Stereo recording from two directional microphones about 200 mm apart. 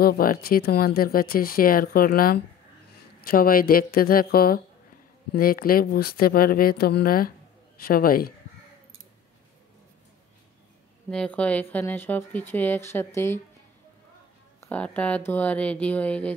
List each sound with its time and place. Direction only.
0.0 s speech: 45° left (ahead or behind)
11.1 s speech: 5° left (ahead or behind)
14.6 s speech: 5° left (ahead or behind)